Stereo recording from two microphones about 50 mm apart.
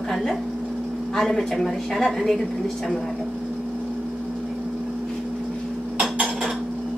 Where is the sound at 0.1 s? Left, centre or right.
Centre.